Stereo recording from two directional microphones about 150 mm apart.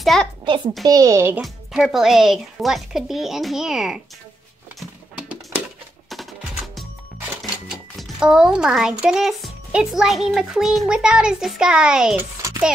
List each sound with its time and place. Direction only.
0.0 s a child's voice: centre (ahead or behind)
0.8 s a child's voice: 25° right (ahead or behind)
1.3 s speech: 5° right (ahead or behind)
6.0 s music: centre (ahead or behind)
7.4 s a child's voice: 5° right (ahead or behind)
12.4 s a sound: 20° right (ahead or behind)